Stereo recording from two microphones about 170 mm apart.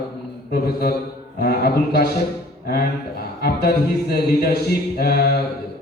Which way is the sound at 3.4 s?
65° left (ahead or behind).